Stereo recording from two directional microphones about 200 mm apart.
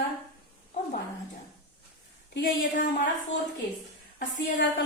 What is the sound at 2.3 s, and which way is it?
Speech, 45° left (ahead or behind).